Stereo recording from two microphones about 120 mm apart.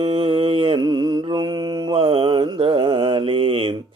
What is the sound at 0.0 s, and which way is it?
Mantra, 50° right (ahead or behind).